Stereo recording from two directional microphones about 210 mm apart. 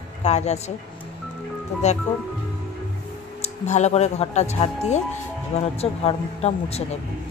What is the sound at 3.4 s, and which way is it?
Speech, 30° left (ahead or behind).